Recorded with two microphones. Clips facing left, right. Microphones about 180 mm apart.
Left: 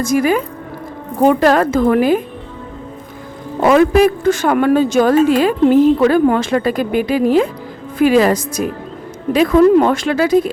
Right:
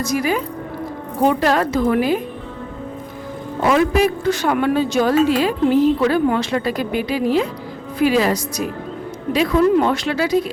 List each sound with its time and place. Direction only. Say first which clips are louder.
0.0 s speech: left 5 dB; 50° left (ahead or behind)
3.7 s speech: left 5 dB; 50° left (ahead or behind)